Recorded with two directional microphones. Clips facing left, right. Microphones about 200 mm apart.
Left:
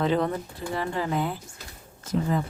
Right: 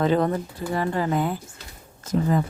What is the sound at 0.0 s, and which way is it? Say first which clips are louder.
Speech: right 3 dB; 45° right (ahead or behind).